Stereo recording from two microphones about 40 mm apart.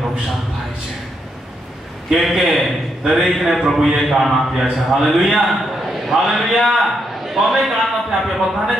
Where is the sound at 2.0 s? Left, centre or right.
Centre.